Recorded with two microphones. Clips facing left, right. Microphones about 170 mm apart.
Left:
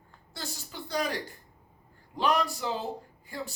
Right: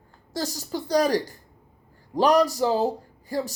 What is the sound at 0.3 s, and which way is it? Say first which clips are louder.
Speech: right 11 dB; 40° right (ahead or behind).